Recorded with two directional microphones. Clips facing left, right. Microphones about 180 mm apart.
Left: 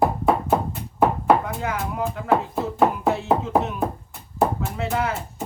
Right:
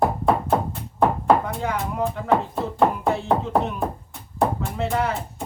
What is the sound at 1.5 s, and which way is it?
Speech, centre (ahead or behind).